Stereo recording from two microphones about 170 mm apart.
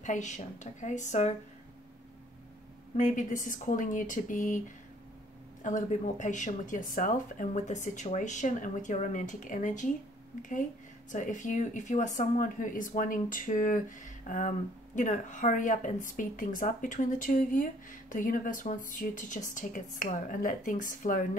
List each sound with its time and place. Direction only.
0.0 s speech: 45° left (ahead or behind)
3.0 s speech: 50° left (ahead or behind)
5.6 s speech: 50° left (ahead or behind)